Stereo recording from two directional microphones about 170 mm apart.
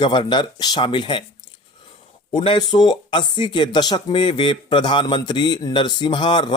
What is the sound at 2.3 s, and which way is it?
Speech, 25° left (ahead or behind).